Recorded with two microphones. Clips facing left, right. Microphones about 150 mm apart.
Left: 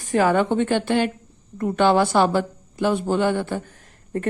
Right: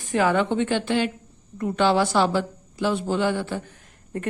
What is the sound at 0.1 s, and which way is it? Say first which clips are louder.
A woman's voice: left 3 dB; 45° left (ahead or behind).